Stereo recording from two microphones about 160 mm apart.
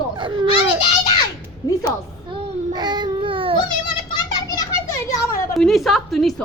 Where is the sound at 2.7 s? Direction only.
25° right (ahead or behind).